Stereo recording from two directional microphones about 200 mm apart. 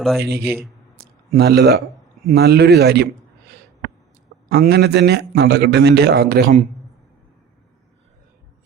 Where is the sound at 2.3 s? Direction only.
55° right (ahead or behind).